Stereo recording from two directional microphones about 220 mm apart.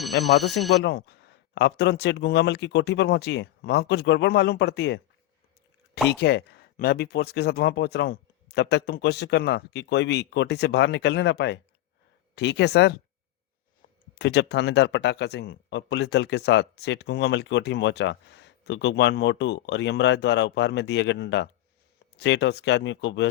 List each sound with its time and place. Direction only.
0.4 s speech: centre (ahead or behind)
0.7 s speech: 50° left (ahead or behind)
6.1 s speech: 45° left (ahead or behind)
14.2 s speech: 50° left (ahead or behind)